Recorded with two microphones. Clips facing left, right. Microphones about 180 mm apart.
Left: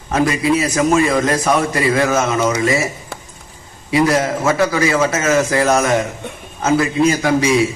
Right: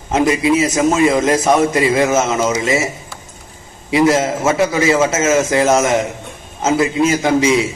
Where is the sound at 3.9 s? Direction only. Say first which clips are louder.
Right 2 dB; 25° right (ahead or behind).